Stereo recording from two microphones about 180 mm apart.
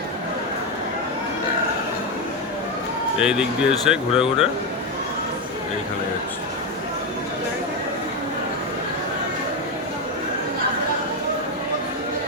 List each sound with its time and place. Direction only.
3.2 s speech: 5° right (ahead or behind)